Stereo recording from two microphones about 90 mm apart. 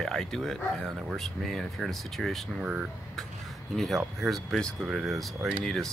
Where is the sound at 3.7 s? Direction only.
Centre (ahead or behind).